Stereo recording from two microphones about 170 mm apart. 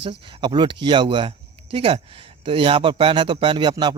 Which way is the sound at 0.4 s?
25° right (ahead or behind).